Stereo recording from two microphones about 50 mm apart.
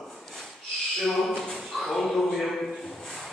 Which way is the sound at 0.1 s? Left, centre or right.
Centre.